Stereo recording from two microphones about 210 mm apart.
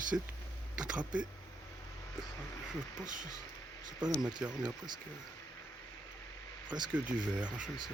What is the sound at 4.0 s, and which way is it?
Speech, 20° right (ahead or behind).